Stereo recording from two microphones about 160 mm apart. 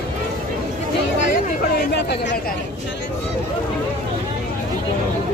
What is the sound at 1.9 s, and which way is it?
Speech, 90° left.